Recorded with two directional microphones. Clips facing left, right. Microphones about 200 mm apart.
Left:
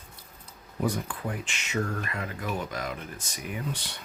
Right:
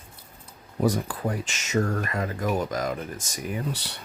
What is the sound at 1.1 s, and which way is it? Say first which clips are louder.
Speech: right 5 dB; 40° right (ahead or behind).